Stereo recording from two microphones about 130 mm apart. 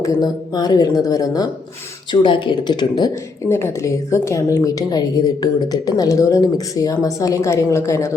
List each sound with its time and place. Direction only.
0.0 s speech: 30° left (ahead or behind)
2.2 s speech: 40° left (ahead or behind)
3.5 s speech: 20° left (ahead or behind)